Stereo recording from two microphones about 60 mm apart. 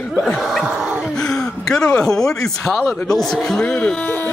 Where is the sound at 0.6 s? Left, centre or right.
Centre.